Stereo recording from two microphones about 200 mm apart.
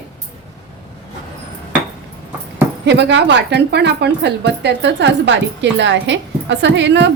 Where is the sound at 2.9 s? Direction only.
60° right (ahead or behind).